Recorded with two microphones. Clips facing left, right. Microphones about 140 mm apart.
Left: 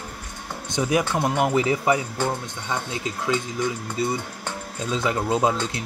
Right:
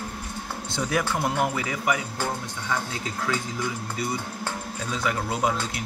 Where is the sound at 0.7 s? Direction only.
20° left (ahead or behind).